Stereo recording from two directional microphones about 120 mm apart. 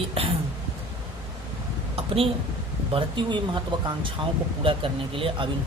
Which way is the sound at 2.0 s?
50° right (ahead or behind).